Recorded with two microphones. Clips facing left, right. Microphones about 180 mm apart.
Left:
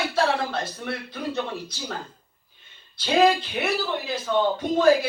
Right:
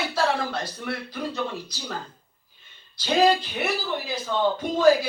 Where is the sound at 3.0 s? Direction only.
55° left (ahead or behind).